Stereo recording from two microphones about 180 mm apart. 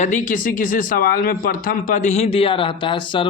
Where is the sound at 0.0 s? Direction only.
45° left (ahead or behind).